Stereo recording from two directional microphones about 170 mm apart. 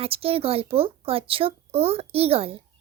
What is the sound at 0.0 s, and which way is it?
Speech, 35° right (ahead or behind).